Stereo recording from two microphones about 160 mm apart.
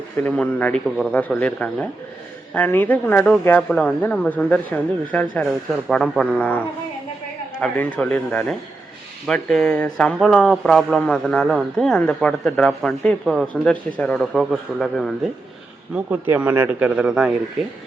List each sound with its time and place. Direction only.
0.2 s a man's voice: 10° left (ahead or behind)
7.6 s a man's voice: 5° left (ahead or behind)
16.0 s speech: 10° right (ahead or behind)